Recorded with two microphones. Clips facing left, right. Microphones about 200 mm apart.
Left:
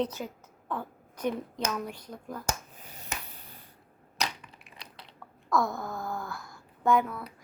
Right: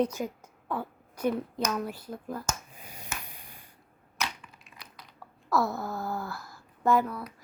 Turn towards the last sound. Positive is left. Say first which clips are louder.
# even
turn(degrees=0)  # may be behind; listen again after turning